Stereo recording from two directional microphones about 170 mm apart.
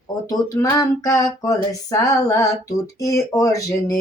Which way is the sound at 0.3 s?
20° left (ahead or behind).